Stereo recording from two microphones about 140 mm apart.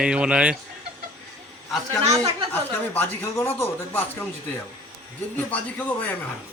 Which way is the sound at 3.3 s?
15° left (ahead or behind).